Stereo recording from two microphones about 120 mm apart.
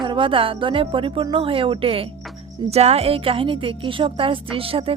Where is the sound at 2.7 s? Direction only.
60° right (ahead or behind).